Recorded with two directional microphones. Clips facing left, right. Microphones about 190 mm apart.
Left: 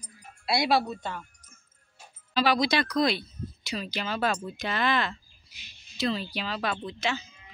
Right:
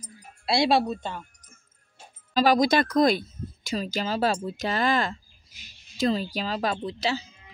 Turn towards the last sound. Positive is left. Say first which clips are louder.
# right 3 dB
turn(degrees=-35)  # may be behind; listen again after turning